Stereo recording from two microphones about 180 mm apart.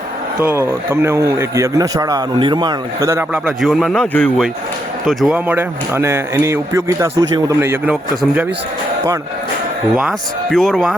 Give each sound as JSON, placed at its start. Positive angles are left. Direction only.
{"t": 0.3, "sound": "a man's voice", "side_deg": -15}
{"t": 3.3, "sound": "a man's voice", "side_deg": 0}
{"t": 5.0, "sound": "a man's voice", "side_deg": -5}
{"t": 9.9, "sound": "a man's voice", "side_deg": -5}